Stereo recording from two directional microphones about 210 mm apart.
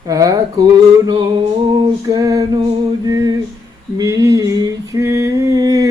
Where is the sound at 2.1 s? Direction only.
15° right (ahead or behind).